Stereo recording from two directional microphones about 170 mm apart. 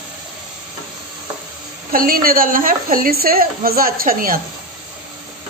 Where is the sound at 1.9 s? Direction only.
60° right (ahead or behind).